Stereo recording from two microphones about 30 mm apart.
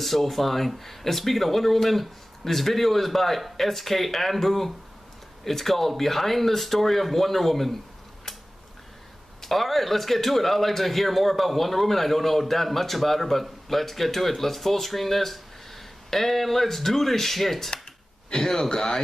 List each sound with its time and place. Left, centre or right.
0.0 s a man's voice: centre
9.4 s a man's voice: centre; by 18.9 s left